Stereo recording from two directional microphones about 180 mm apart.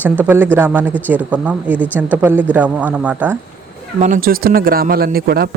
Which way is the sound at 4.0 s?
50° right (ahead or behind).